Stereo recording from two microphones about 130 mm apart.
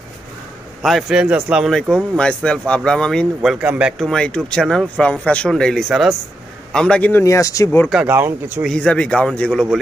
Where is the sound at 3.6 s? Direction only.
10° right (ahead or behind).